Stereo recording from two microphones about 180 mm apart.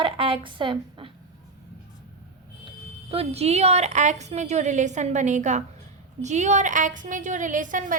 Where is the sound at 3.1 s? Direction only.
35° right (ahead or behind).